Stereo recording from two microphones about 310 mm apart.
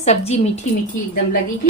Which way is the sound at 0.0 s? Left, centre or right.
Centre.